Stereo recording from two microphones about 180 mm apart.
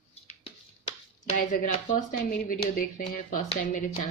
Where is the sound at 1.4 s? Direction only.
50° left (ahead or behind).